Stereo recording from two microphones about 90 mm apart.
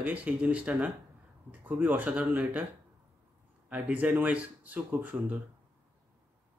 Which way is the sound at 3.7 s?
15° right (ahead or behind).